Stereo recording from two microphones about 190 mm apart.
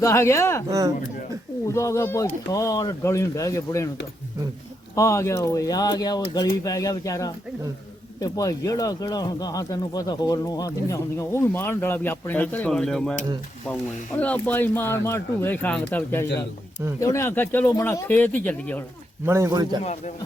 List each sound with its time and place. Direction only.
0.0 s speech: 15° left (ahead or behind)
0.7 s speech: 20° right (ahead or behind)
1.6 s speech: 15° left (ahead or behind)
4.9 s speech: 15° left (ahead or behind)
14.2 s speech: 10° left (ahead or behind)
19.2 s speech: 15° right (ahead or behind)
19.8 s speech: 35° left (ahead or behind)